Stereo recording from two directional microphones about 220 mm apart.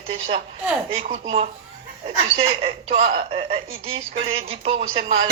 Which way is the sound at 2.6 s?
30° right (ahead or behind).